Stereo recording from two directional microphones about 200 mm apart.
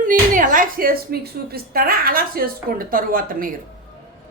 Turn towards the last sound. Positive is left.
turn(degrees=-45)  # may be behind; listen again after turning